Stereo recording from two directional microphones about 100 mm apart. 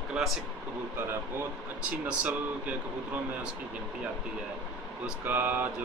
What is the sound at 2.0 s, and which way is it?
Speech, 15° right (ahead or behind).